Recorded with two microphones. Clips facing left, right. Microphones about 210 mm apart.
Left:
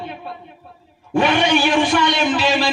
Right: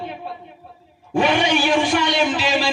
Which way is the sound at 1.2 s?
65° left (ahead or behind).